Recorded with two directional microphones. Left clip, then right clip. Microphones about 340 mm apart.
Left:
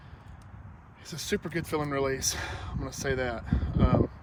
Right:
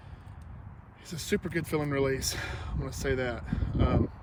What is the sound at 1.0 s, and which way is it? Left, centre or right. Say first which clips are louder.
Speech: even; centre.